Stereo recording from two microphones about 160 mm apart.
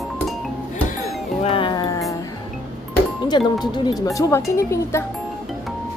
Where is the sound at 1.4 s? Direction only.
35° left (ahead or behind).